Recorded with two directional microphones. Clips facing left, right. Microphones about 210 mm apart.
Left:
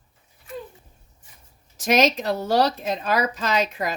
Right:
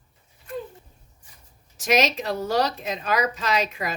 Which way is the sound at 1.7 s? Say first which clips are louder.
Left 2 dB; 40° left (ahead or behind).